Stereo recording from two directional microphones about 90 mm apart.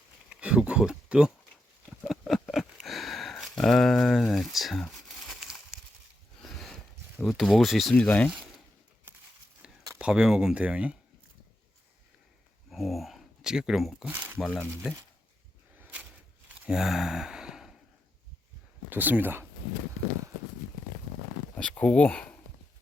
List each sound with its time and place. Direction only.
0.3 s a sound: 10° right (ahead or behind)
7.3 s speech: centre (ahead or behind)
7.9 s speech: 15° left (ahead or behind)
10.0 s speech: 10° right (ahead or behind)
12.7 s speech: centre (ahead or behind)
14.3 s speech: 10° left (ahead or behind)
15.8 s a sound: 15° right (ahead or behind)
16.5 s sigh: 10° right (ahead or behind)
18.9 s speech: 20° right (ahead or behind)
21.5 s speech: 15° left (ahead or behind)